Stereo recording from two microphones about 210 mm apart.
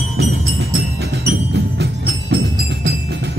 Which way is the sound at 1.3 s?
50° right (ahead or behind).